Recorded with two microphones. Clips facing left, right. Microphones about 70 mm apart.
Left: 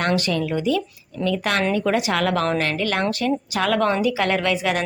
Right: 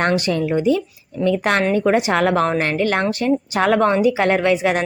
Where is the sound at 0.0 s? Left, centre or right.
Right.